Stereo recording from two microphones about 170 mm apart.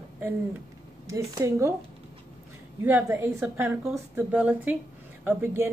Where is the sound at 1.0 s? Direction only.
20° right (ahead or behind).